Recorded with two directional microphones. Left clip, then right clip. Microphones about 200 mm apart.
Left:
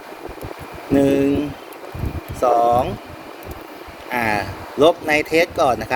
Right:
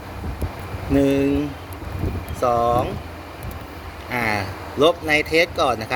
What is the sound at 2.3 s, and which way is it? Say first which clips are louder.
Speech: left 3 dB; centre (ahead or behind).